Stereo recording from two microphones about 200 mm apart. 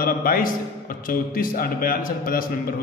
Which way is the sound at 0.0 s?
45° left (ahead or behind).